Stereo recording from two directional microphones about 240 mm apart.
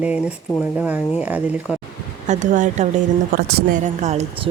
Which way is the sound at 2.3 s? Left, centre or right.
Right.